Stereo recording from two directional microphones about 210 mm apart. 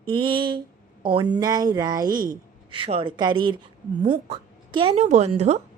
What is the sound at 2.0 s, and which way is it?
Speech, 40° right (ahead or behind).